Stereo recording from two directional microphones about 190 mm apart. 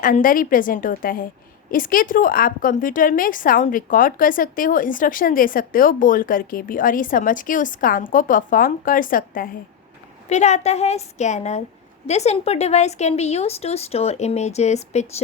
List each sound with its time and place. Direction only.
0.0 s a woman's voice: 45° left (ahead or behind)
10.2 s speech: 35° left (ahead or behind)